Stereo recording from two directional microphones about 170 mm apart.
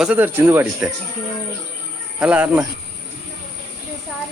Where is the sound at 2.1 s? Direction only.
5° right (ahead or behind).